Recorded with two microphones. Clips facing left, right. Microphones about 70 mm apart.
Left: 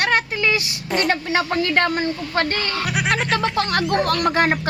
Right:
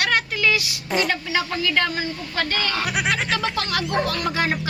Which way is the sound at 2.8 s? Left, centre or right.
Centre.